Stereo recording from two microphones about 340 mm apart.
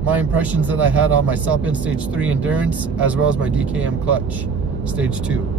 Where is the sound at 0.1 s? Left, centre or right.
Centre.